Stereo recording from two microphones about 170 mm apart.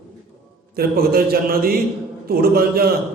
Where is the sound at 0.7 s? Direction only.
60° right (ahead or behind).